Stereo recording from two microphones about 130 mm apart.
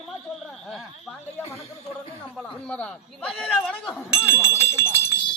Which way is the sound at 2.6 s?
10° left (ahead or behind).